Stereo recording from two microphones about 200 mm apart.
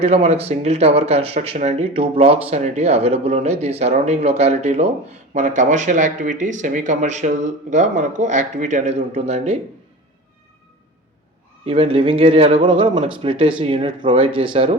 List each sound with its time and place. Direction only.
0.0 s speech: 30° right (ahead or behind)
11.6 s speech: 30° right (ahead or behind)